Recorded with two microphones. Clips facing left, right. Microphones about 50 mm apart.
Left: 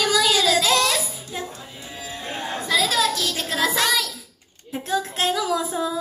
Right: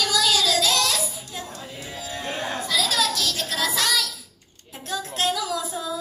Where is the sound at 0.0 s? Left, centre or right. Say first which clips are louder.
Left 3 dB; left.